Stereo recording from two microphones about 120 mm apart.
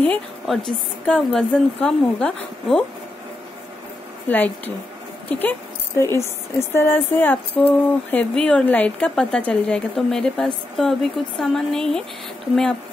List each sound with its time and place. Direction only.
0.7 s speech: 5° left (ahead or behind)
4.3 s a woman's voice: 15° left (ahead or behind)